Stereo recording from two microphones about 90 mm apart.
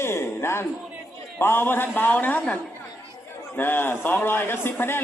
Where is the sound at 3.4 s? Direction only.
25° left (ahead or behind).